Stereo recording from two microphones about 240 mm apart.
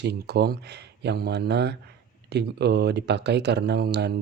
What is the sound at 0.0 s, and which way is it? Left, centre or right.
Speech, right.